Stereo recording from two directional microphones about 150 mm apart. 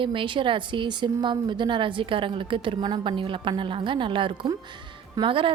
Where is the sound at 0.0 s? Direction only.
35° right (ahead or behind).